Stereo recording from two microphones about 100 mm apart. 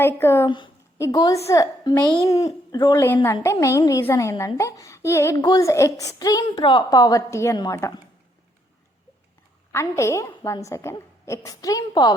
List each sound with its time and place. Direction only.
0.0 s a woman's voice: 25° left (ahead or behind)
0.4 s a woman's voice: 50° left (ahead or behind)
1.1 s a woman's voice: 40° left (ahead or behind)
2.7 s a woman's voice: 50° left (ahead or behind)
3.2 s a woman's voice: 30° left (ahead or behind)
5.4 s a woman's voice: 40° left (ahead or behind)
7.5 s a woman's voice: 40° left (ahead or behind)
9.7 s a woman's voice: 30° left (ahead or behind)